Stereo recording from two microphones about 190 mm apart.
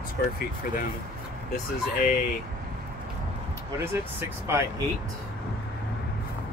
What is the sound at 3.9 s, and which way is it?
Speech, 10° right (ahead or behind).